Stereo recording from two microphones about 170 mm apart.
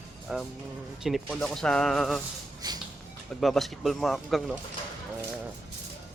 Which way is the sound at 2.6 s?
25° right (ahead or behind).